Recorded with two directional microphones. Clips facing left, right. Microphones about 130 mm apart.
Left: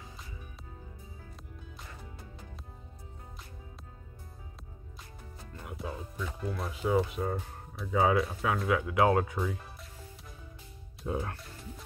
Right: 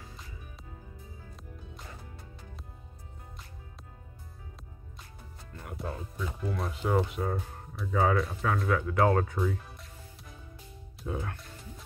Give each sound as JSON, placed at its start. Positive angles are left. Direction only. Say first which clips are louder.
{"t": 5.6, "sound": "speech", "louder": "right 1 dB", "side_deg": 0}
{"t": 11.1, "sound": "speech", "louder": "left 2 dB", "side_deg": 30}